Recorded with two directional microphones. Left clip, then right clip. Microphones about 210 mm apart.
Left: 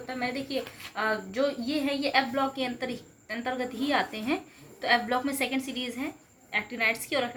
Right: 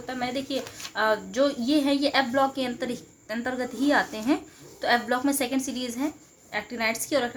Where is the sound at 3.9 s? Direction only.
55° right (ahead or behind).